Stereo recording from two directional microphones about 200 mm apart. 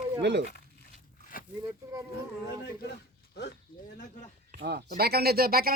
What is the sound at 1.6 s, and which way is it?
Speech, 15° right (ahead or behind).